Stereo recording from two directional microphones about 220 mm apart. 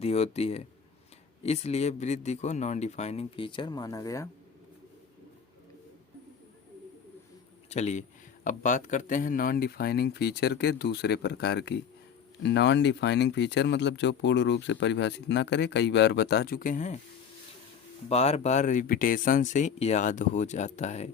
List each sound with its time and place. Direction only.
0.0 s a man's voice: 30° left (ahead or behind)
7.7 s speech: 30° left (ahead or behind)
18.1 s speech: 30° left (ahead or behind)